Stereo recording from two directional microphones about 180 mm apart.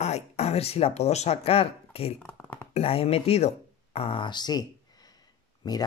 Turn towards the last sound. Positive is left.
turn(degrees=20)  # may be behind; listen again after turning